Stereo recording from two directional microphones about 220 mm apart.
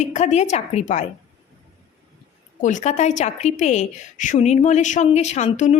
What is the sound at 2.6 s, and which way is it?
A woman's voice, 35° left (ahead or behind).